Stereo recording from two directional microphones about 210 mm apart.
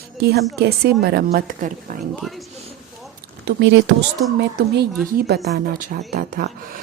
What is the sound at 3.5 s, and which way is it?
Speech, 55° right (ahead or behind).